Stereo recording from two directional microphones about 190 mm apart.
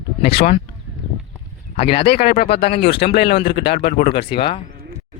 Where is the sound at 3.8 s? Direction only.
50° left (ahead or behind).